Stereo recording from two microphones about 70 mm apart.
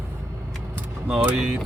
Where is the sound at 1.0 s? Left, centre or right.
Centre.